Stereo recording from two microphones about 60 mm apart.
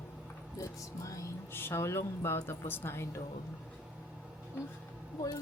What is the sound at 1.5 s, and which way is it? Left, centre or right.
Speech, left.